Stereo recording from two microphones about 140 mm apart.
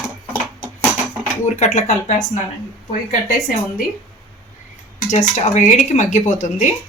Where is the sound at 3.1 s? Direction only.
75° left (ahead or behind).